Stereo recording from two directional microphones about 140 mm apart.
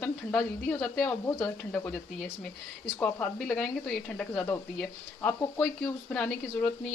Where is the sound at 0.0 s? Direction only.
5° left (ahead or behind).